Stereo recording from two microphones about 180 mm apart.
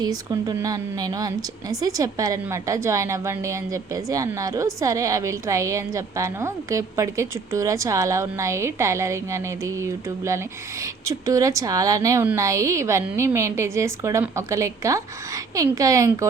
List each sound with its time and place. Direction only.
0.0 s a woman's voice: 20° right (ahead or behind)